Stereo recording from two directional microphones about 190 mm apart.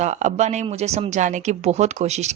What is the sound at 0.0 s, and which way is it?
A woman's voice, 40° right (ahead or behind).